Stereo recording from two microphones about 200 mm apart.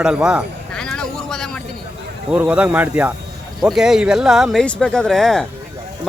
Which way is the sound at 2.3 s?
5° right (ahead or behind).